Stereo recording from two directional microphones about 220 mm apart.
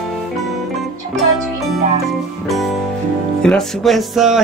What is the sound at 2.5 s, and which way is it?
Music, centre (ahead or behind).